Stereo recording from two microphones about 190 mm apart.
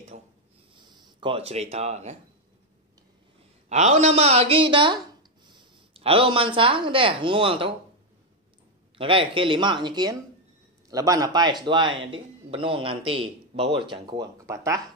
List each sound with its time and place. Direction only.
0.1 s speech: 45° right (ahead or behind)
0.7 s speech: 20° right (ahead or behind)
3.6 s a woman's voice: 35° right (ahead or behind)
8.9 s speech: 25° right (ahead or behind)